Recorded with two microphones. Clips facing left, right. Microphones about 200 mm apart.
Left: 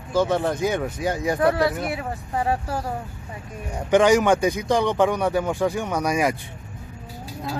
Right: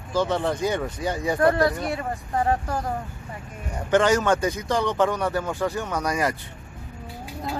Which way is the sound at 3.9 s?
15° left (ahead or behind).